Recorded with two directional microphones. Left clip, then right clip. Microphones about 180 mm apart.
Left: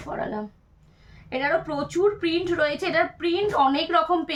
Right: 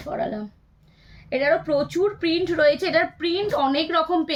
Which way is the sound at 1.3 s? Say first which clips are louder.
Right 4 dB; 20° left (ahead or behind).